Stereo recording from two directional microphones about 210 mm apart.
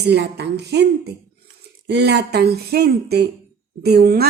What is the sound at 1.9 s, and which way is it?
A woman's voice, 50° right (ahead or behind).